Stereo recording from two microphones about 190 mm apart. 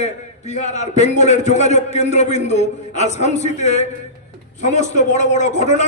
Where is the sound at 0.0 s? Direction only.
35° left (ahead or behind).